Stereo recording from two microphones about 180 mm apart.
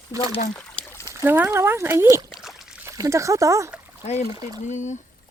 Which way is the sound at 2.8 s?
15° right (ahead or behind).